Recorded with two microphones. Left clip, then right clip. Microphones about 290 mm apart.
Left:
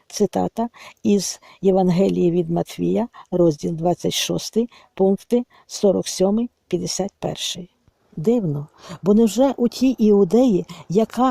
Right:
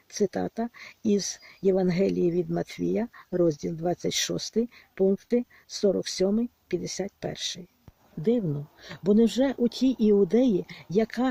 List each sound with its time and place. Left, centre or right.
0.1 s speech: left